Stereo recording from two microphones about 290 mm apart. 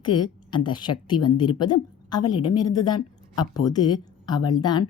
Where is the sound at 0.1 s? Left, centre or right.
Left.